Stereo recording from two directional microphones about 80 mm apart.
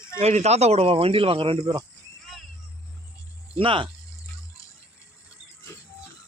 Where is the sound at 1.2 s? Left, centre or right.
Right.